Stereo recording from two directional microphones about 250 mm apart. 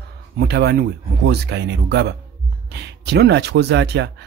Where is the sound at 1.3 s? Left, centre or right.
Right.